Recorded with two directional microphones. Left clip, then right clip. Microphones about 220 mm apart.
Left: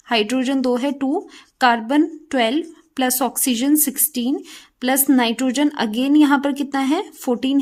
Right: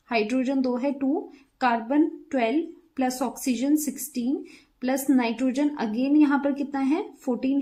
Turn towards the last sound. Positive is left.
turn(degrees=40)  # may be behind; listen again after turning